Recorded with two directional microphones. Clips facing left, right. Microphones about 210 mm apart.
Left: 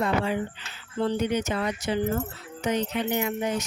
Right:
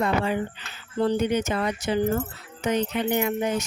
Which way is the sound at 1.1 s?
55° right (ahead or behind).